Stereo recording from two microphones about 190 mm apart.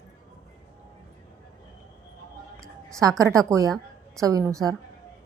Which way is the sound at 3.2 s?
15° right (ahead or behind).